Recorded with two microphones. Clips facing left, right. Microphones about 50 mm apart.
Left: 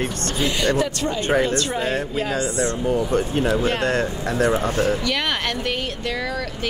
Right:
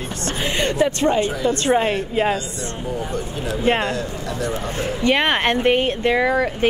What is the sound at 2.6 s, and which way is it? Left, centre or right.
Speech, left.